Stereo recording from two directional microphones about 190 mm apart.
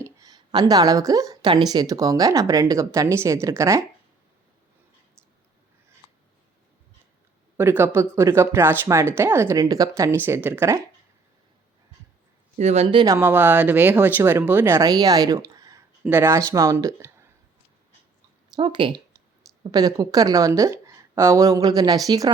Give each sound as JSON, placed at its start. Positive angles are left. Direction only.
{"t": 0.0, "sound": "speech", "side_deg": -20}
{"t": 7.5, "sound": "speech", "side_deg": -10}
{"t": 12.5, "sound": "speech", "side_deg": -35}
{"t": 13.1, "sound": "speech", "side_deg": -10}
{"t": 18.5, "sound": "speech", "side_deg": -25}